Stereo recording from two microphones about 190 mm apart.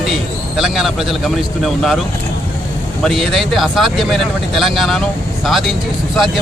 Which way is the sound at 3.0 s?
Centre (ahead or behind).